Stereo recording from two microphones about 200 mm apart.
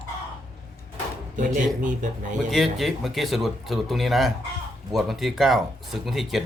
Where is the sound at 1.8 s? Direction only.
40° right (ahead or behind).